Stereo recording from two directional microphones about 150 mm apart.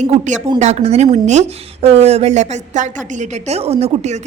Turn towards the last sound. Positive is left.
turn(degrees=-45)  # may be behind; listen again after turning